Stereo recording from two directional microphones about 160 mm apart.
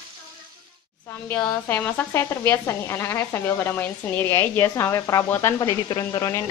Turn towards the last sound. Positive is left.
turn(degrees=20)  # may be behind; listen again after turning